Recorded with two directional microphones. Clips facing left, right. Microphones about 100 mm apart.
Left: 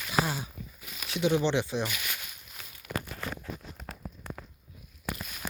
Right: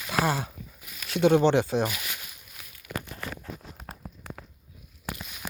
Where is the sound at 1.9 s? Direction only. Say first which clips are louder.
Even; 25° right (ahead or behind).